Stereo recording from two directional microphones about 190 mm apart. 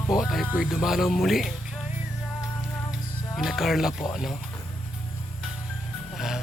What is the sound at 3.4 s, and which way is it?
Speech, centre (ahead or behind).